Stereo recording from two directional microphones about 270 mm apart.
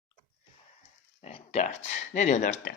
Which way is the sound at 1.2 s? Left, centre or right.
Left.